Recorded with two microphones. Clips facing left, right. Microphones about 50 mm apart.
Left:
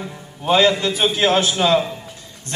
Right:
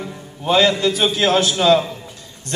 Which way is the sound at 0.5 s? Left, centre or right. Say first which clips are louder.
Even; centre.